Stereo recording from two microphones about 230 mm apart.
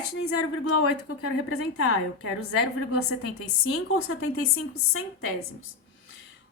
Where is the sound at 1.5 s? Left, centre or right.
Left.